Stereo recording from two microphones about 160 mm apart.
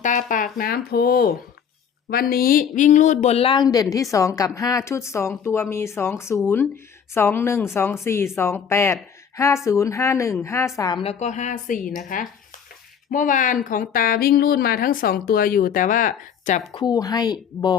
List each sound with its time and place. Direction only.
0.0 s a woman's voice: 50° left (ahead or behind); by 11.0 s 25° left (ahead or behind)
11.0 s speech: 45° left (ahead or behind)
16.7 s speech: 25° left (ahead or behind)